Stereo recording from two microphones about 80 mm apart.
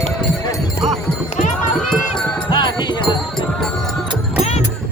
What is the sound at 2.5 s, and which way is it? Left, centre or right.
Music, left.